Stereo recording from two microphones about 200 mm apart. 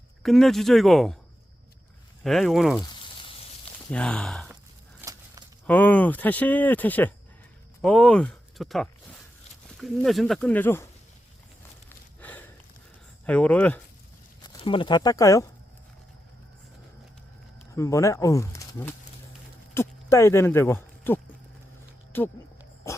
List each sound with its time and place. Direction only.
0.2 s speech: centre (ahead or behind)
2.2 s speech: centre (ahead or behind)
2.8 s frying: 25° left (ahead or behind)
3.9 s speech: 5° left (ahead or behind)
4.9 s a sound: 15° right (ahead or behind)
5.6 s speech: 10° left (ahead or behind)
11.9 s a sound: 10° left (ahead or behind)
13.2 s speech: 5° left (ahead or behind)
14.4 s speech: 25° left (ahead or behind)
17.7 s speech: 15° left (ahead or behind)